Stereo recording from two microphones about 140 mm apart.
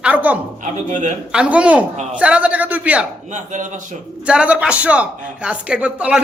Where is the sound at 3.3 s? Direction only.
60° right (ahead or behind).